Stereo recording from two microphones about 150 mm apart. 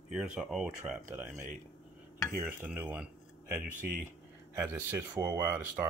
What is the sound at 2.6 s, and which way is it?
Speech, 10° right (ahead or behind).